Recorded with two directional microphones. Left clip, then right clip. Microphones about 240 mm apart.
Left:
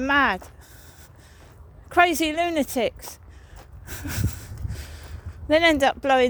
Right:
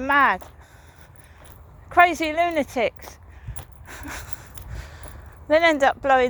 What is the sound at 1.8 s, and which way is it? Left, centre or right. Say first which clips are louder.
Speech: right 2 dB; left.